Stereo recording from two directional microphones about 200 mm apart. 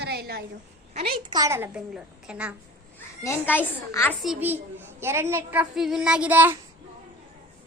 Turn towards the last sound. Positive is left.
turn(degrees=-10)  # may be behind; listen again after turning